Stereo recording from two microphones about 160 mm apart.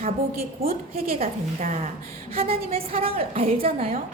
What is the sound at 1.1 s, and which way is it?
A woman's voice, 45° right (ahead or behind).